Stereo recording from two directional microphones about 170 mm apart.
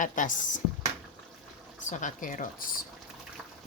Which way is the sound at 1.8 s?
45° left (ahead or behind).